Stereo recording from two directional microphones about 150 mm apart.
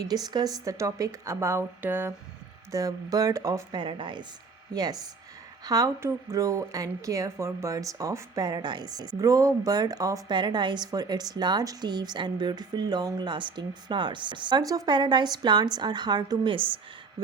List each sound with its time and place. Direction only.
0.0 s a woman's voice: 25° right (ahead or behind)
2.7 s a woman's voice: 25° right (ahead or behind)